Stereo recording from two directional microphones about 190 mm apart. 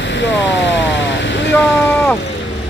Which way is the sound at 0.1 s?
70° left (ahead or behind).